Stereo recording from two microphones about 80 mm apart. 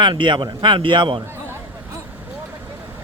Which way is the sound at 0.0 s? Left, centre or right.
Right.